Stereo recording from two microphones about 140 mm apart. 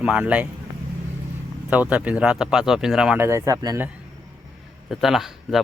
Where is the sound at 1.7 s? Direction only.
10° right (ahead or behind).